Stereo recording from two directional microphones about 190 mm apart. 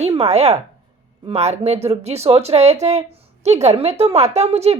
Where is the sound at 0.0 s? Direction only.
35° right (ahead or behind).